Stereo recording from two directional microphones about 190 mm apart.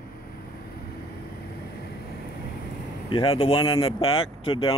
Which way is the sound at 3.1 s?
30° left (ahead or behind).